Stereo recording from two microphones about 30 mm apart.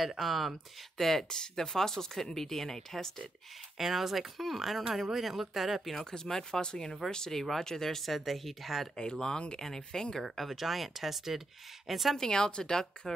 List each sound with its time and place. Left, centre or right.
0.2 s speech: centre
0.9 s speech: centre
1.3 s speech: left
3.7 s speech: centre
6.1 s a woman's voice: centre
7.3 s speech: centre
8.1 s speech: centre
8.9 s a woman's voice: left
10.3 s speech: centre
12.2 s a woman's voice: left